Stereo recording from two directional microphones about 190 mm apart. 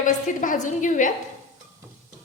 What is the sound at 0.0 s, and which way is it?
A woman's voice, 45° left (ahead or behind).